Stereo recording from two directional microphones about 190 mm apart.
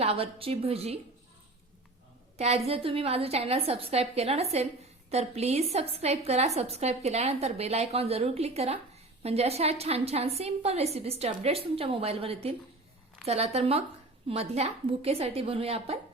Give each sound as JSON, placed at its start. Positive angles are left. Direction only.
{"t": 0.0, "sound": "a woman's voice", "side_deg": -30}
{"t": 2.4, "sound": "a woman's voice", "side_deg": -30}